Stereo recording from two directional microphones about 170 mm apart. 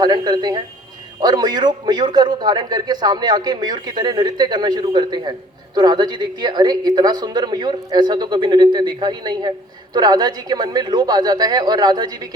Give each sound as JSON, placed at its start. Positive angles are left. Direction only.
{"t": 0.0, "sound": "a man's voice", "side_deg": -25}